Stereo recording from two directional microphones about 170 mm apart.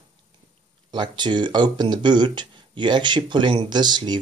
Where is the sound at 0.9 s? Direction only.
25° right (ahead or behind).